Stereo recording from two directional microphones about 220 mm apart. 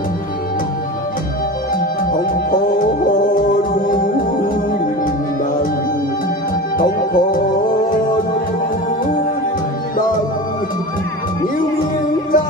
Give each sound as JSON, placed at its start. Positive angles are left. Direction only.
{"t": 3.8, "sound": "music", "side_deg": 40}
{"t": 6.8, "sound": "music", "side_deg": 40}